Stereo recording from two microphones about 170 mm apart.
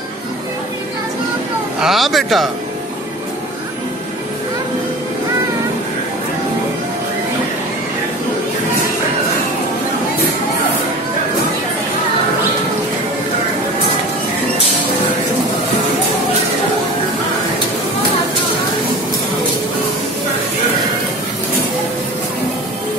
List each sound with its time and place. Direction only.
1.8 s speech: centre (ahead or behind)